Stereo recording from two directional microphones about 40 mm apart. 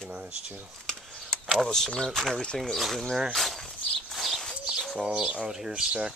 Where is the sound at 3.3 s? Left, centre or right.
Centre.